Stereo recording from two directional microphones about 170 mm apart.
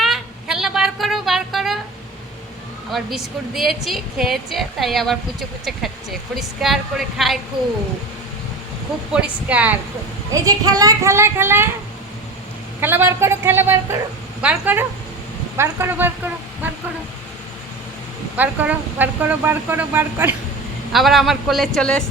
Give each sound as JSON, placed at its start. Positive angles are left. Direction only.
{"t": 0.0, "sound": "a sound", "side_deg": 0}
{"t": 2.9, "sound": "a woman's voice", "side_deg": 0}
{"t": 9.1, "sound": "speech", "side_deg": -10}
{"t": 10.3, "sound": "speech", "side_deg": -20}
{"t": 12.8, "sound": "speech", "side_deg": -15}
{"t": 18.3, "sound": "speech", "side_deg": -10}
{"t": 20.9, "sound": "a woman's voice", "side_deg": 0}